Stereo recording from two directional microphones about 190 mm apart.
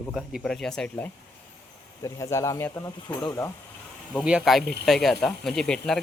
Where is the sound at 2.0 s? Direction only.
15° left (ahead or behind).